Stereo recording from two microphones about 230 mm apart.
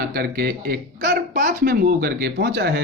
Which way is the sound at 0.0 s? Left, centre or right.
Right.